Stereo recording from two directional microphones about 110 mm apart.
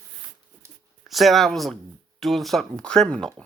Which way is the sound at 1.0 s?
Centre (ahead or behind).